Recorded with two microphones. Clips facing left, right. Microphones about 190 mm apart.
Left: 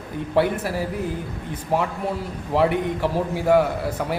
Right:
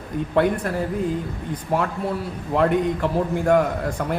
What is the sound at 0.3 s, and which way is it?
A man's voice, 5° left (ahead or behind).